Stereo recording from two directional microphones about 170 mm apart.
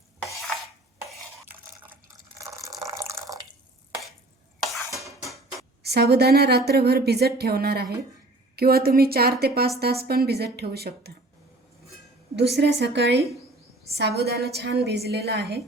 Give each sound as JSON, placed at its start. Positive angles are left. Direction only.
{"t": 1.5, "sound": "water", "side_deg": -10}
{"t": 5.2, "sound": "rodents", "side_deg": 0}
{"t": 5.8, "sound": "a woman's voice", "side_deg": -70}
{"t": 12.4, "sound": "a woman's voice", "side_deg": -85}
{"t": 13.9, "sound": "a woman's voice", "side_deg": -70}